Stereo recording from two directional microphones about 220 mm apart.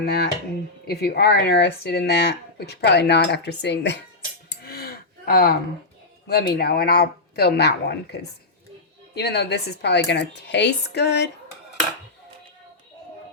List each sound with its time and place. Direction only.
0.0 s speech: 45° left (ahead or behind)
4.6 s a sound: 45° left (ahead or behind)
6.2 s speech: 45° left (ahead or behind)